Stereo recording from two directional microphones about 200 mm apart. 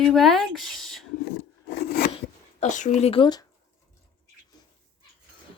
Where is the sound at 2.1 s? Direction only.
35° left (ahead or behind).